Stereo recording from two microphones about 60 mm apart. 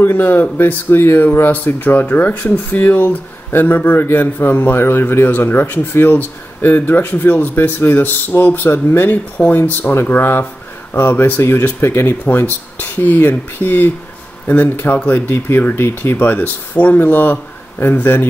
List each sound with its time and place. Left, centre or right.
0.0 s speech: left